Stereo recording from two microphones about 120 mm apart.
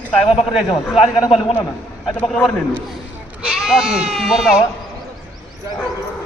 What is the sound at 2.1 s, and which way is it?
Speech, 10° left (ahead or behind).